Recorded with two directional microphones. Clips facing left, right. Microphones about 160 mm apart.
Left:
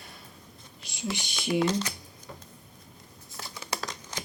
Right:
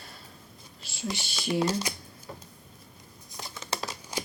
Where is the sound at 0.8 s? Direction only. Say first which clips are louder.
Even; 20° left (ahead or behind).